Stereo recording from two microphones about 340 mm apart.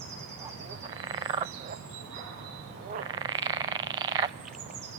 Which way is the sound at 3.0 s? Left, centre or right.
Centre.